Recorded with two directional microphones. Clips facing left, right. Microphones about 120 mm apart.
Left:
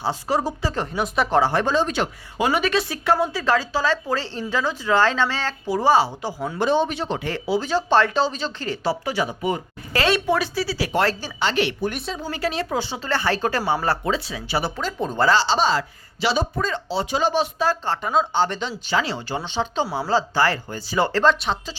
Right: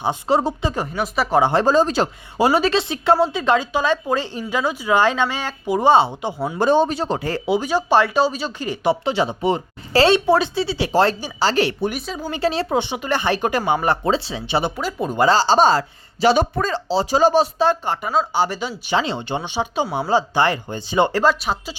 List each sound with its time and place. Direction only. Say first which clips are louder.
0.0 s a woman's voice: right 4 dB; 20° right (ahead or behind)
0.7 s speech: right 1 dB; 5° right (ahead or behind)
1.4 s a woman's voice: right 3 dB; 25° right (ahead or behind)
1.6 s a woman's voice: right 5 dB; 40° right (ahead or behind)
6.6 s speech: right 4 dB; 45° right (ahead or behind)
7.4 s a woman's voice: right 2 dB; 15° right (ahead or behind)
11.3 s speech: right 4 dB; 40° right (ahead or behind)
11.9 s speech: right 2 dB; centre (ahead or behind)
12.3 s a woman's voice: right 5 dB; 30° right (ahead or behind)
14.0 s a woman's voice: right 4 dB; 30° right (ahead or behind)
14.8 s speech: right 3 dB; 5° right (ahead or behind)
15.4 s speech: right 5 dB; 45° right (ahead or behind)
17.8 s speech: right 1 dB; 15° right (ahead or behind)
18.9 s speech: right 3 dB; 20° right (ahead or behind)